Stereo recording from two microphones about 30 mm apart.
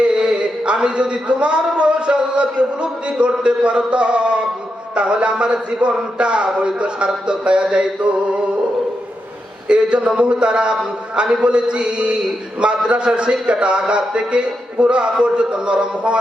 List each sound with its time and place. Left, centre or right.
0.0 s a man's voice: right
9.6 s a man's voice: right